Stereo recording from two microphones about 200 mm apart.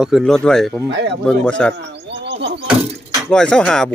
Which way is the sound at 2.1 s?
55° right (ahead or behind).